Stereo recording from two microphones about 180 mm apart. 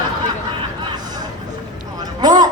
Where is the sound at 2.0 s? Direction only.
20° right (ahead or behind).